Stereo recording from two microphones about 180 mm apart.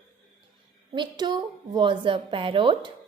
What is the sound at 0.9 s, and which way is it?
A woman's voice, 25° right (ahead or behind).